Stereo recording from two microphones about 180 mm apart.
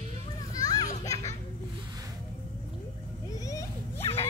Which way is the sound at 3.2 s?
20° left (ahead or behind).